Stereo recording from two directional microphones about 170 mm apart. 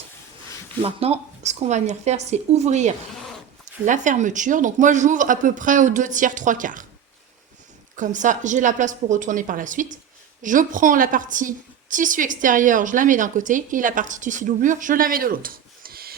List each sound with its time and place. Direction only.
0.8 s a woman's voice: 35° right (ahead or behind); by 6.8 s 50° right (ahead or behind)
7.9 s a woman's voice: 50° right (ahead or behind)